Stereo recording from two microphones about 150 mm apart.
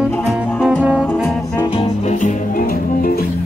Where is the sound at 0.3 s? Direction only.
Centre (ahead or behind).